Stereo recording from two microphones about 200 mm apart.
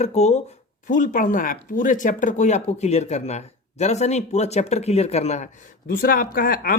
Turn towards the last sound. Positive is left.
turn(degrees=45)  # may be behind; listen again after turning